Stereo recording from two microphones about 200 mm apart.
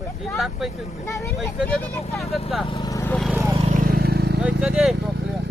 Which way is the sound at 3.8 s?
50° right (ahead or behind).